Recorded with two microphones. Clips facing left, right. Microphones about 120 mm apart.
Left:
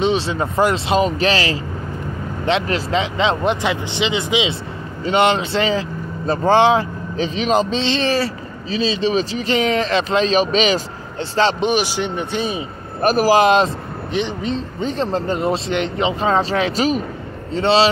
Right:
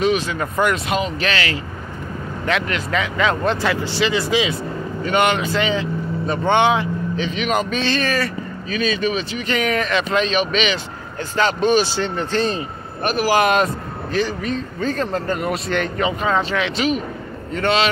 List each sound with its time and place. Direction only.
0.0 s speech: 30° left (ahead or behind)
11.6 s speech: 15° left (ahead or behind)
13.0 s speech: 40° left (ahead or behind)